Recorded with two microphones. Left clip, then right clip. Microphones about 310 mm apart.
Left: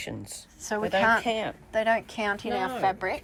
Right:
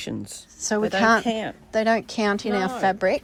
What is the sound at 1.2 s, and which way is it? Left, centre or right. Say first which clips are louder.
Speech: right 2 dB; right.